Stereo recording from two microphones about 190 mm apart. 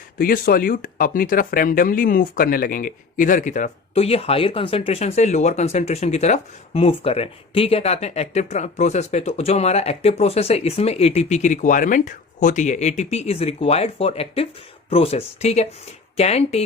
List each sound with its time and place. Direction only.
0.2 s speech: 50° left (ahead or behind); by 16.6 s 35° left (ahead or behind)